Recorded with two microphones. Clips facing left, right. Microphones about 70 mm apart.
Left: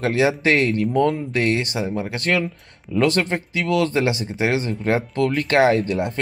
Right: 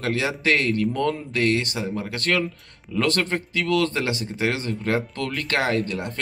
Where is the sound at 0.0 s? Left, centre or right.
Left.